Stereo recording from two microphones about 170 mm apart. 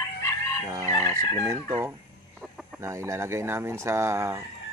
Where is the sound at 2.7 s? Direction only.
15° right (ahead or behind).